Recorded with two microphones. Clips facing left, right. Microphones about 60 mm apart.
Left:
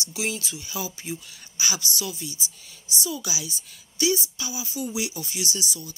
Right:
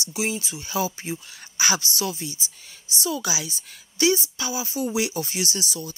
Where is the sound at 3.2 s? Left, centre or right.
Right.